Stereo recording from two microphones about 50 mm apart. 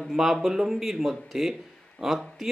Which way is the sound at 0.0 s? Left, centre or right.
Centre.